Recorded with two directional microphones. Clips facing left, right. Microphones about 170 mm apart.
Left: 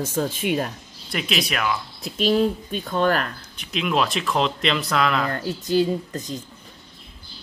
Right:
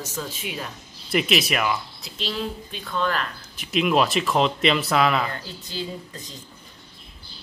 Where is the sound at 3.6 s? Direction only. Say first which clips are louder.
Right 2 dB; 5° right (ahead or behind).